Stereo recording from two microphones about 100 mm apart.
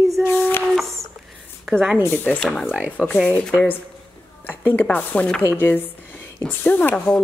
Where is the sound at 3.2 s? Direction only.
15° left (ahead or behind).